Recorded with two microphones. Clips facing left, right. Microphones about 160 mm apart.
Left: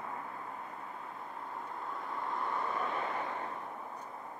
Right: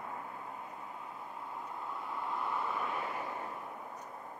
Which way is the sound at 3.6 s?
35° left (ahead or behind).